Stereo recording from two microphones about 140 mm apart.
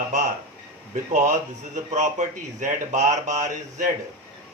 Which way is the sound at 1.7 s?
60° right (ahead or behind).